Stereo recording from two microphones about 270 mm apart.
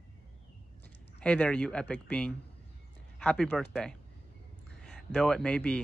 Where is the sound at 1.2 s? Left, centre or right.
Centre.